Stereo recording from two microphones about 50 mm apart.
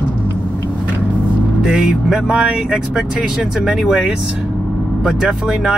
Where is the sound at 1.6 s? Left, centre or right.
Centre.